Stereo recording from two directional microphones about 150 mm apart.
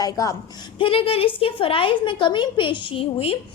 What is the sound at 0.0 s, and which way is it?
Speech, 25° left (ahead or behind).